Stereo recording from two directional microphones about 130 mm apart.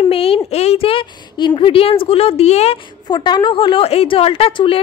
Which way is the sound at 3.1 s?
35° left (ahead or behind).